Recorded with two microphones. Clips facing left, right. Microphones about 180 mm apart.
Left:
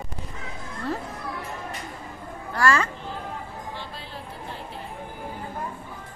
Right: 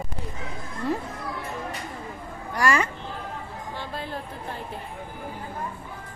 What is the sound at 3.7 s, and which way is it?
Music, 50° right (ahead or behind).